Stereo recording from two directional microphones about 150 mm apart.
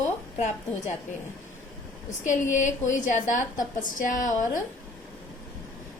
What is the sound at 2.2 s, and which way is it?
A woman's voice, 55° left (ahead or behind).